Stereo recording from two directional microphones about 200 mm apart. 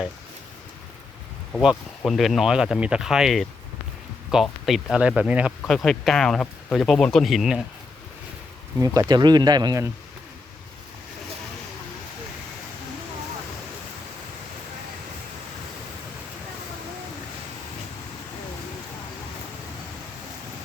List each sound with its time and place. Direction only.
1.5 s speech: 5° left (ahead or behind)
8.8 s speech: 15° right (ahead or behind)